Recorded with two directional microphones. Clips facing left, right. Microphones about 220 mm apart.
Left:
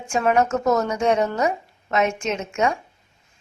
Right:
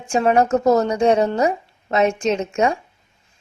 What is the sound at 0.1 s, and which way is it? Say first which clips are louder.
A woman's voice: right 3 dB; 30° right (ahead or behind).